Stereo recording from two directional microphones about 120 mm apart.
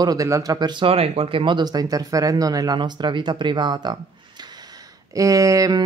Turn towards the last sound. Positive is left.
turn(degrees=-30)  # may be behind; listen again after turning